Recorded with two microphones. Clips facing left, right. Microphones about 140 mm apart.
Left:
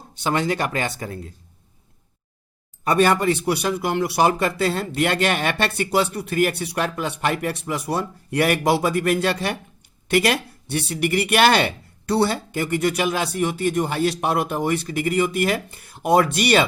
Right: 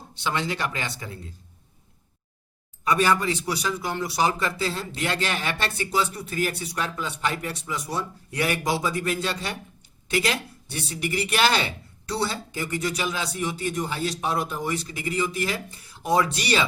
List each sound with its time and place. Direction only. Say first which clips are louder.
0.1 s speech: left 6 dB; 45° left (ahead or behind)
2.8 s speech: left 4 dB; 60° left (ahead or behind)